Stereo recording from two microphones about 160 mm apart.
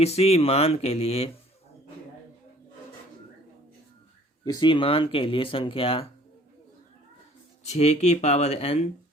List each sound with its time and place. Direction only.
0.0 s speech: 40° left (ahead or behind)
4.4 s speech: 25° left (ahead or behind)
7.7 s speech: 45° left (ahead or behind)